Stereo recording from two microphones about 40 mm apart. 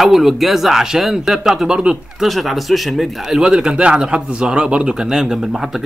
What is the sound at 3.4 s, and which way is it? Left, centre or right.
A man's voice, centre.